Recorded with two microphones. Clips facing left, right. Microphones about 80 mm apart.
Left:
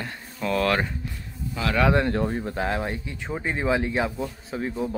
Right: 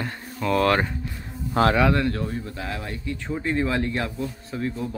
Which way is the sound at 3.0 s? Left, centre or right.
Centre.